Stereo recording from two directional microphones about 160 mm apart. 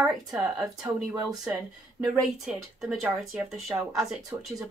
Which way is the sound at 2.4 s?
Centre (ahead or behind).